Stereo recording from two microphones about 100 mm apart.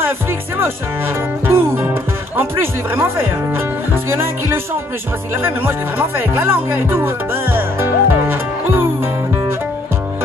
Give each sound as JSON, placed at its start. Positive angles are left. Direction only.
{"t": 1.5, "sound": "speech", "side_deg": -20}
{"t": 7.5, "sound": "music", "side_deg": -20}